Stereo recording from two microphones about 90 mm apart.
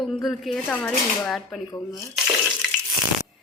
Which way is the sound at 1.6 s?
40° left (ahead or behind).